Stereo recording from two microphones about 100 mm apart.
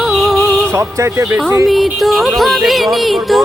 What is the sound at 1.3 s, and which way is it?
Speech, 20° right (ahead or behind).